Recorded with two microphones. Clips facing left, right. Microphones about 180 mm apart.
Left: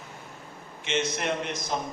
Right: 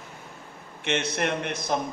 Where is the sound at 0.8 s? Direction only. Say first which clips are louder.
Right 2 dB; 60° right (ahead or behind).